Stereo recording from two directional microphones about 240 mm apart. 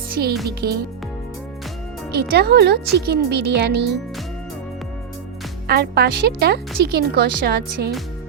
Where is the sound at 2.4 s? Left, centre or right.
Right.